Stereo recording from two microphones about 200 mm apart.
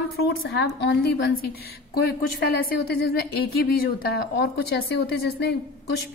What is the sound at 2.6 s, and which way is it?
A woman's voice, 50° left (ahead or behind).